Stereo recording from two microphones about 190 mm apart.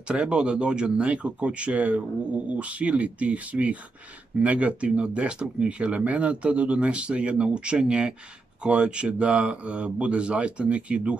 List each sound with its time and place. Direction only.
0.1 s speech: 5° right (ahead or behind)